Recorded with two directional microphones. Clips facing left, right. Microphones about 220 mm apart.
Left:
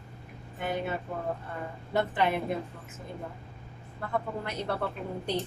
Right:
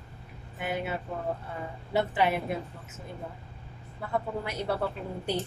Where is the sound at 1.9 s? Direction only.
5° right (ahead or behind).